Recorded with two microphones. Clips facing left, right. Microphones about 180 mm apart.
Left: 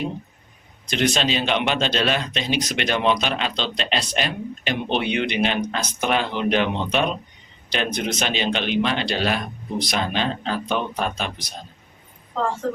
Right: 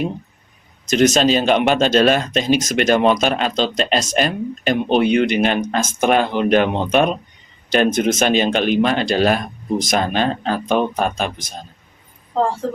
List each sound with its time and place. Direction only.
0.9 s a man's voice: 45° right (ahead or behind)